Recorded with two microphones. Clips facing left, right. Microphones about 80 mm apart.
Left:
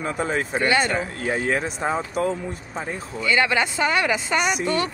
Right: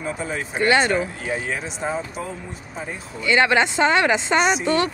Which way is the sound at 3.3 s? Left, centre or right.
Right.